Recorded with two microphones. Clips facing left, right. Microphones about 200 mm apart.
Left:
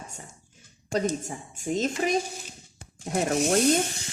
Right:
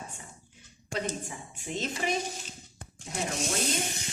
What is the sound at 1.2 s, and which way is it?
Speech, 45° left (ahead or behind).